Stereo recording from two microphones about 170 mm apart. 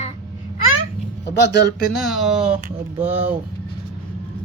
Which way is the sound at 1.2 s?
90° left.